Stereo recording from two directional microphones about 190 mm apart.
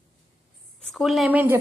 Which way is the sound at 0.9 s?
Centre (ahead or behind).